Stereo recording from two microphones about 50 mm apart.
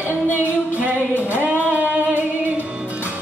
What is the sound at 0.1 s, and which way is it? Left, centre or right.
Music, left.